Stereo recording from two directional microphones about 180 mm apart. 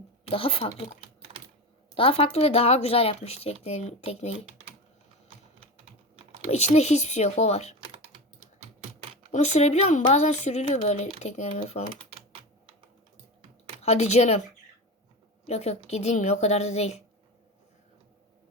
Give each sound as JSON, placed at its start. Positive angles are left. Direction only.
{"t": 0.3, "sound": "speech", "side_deg": 30}
{"t": 2.0, "sound": "speech", "side_deg": 30}
{"t": 6.5, "sound": "speech", "side_deg": 40}
{"t": 9.3, "sound": "speech", "side_deg": 40}
{"t": 13.8, "sound": "speech", "side_deg": 35}
{"t": 15.4, "sound": "speech", "side_deg": 35}